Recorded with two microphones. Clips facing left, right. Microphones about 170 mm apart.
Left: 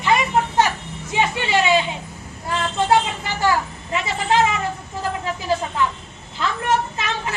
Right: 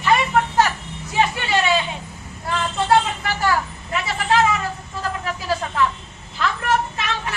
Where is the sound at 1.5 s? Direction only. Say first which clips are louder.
Left 2 dB; 20° left (ahead or behind).